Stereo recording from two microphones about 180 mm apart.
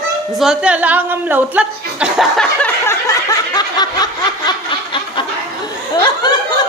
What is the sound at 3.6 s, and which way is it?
Snicker, 20° left (ahead or behind).